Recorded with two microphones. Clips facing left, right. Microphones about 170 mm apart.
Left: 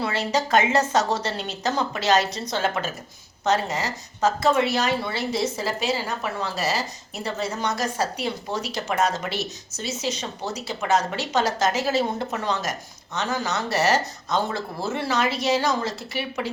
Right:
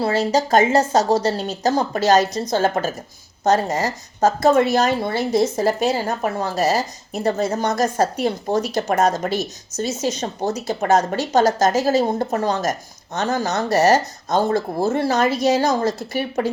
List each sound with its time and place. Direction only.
0.0 s a woman's voice: 40° right (ahead or behind)